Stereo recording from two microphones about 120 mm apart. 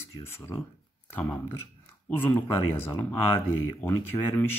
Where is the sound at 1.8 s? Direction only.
20° left (ahead or behind).